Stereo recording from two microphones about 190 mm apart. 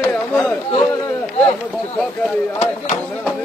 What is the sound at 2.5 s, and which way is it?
Speech, 35° left (ahead or behind).